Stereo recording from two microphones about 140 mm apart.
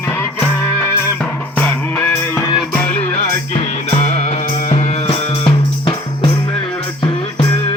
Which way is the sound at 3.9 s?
55° left (ahead or behind).